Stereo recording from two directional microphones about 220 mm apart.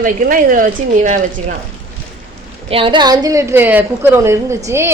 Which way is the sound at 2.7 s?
25° right (ahead or behind).